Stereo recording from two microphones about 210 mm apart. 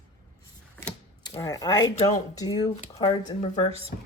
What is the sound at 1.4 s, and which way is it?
Speech, 15° left (ahead or behind).